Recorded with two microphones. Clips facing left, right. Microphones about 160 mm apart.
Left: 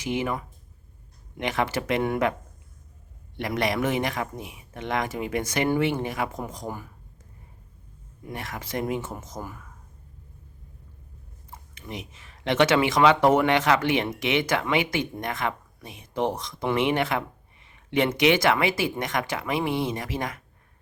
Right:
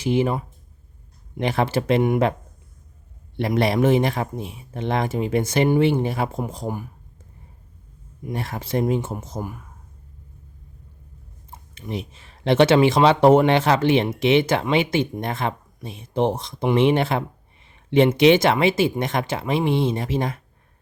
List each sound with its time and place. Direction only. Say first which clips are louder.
0.0 s speech: right 7 dB; 30° right (ahead or behind)
3.3 s speech: right 6 dB; 30° right (ahead or behind)
8.3 s speech: right 7 dB; 30° right (ahead or behind)
9.4 s speech: right 6 dB; 15° right (ahead or behind)
11.7 s speech: right 7 dB; 30° right (ahead or behind)